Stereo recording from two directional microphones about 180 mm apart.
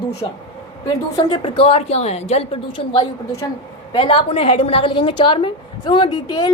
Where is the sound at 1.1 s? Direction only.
25° left (ahead or behind).